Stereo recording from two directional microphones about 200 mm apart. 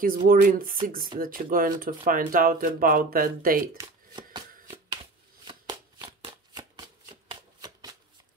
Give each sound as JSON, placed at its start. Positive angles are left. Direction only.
{"t": 0.0, "sound": "speech", "side_deg": -45}
{"t": 3.7, "sound": "hands", "side_deg": -20}
{"t": 5.4, "sound": "shuffling cards", "side_deg": -20}